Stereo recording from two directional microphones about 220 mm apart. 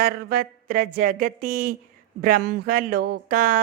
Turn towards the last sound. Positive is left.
turn(degrees=-40)  # may be behind; listen again after turning